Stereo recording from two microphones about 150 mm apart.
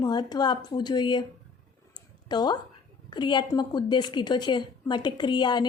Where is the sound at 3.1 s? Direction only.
30° left (ahead or behind).